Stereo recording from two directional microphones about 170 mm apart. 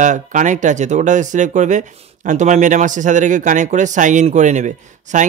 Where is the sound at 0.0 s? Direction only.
45° right (ahead or behind).